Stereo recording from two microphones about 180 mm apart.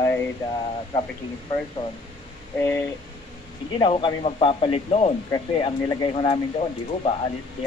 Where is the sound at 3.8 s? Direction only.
25° left (ahead or behind).